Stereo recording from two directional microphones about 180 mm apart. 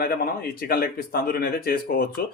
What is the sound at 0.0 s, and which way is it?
Speech, 55° left (ahead or behind).